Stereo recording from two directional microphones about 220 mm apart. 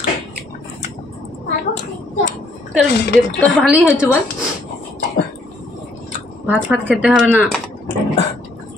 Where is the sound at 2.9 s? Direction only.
50° left (ahead or behind).